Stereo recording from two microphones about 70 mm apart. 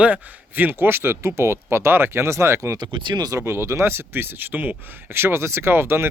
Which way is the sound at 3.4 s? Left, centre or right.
Right.